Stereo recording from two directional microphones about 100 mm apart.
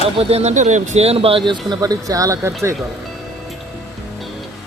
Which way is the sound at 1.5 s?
40° right (ahead or behind).